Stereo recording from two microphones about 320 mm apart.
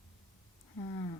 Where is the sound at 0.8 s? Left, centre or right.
Centre.